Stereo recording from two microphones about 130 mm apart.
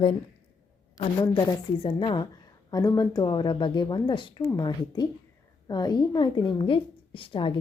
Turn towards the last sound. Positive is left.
turn(degrees=40)  # may be behind; listen again after turning